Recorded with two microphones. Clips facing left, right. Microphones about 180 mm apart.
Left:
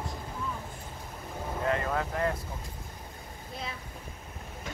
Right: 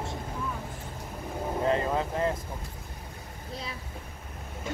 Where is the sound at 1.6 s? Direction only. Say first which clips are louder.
Right 3 dB; 25° right (ahead or behind).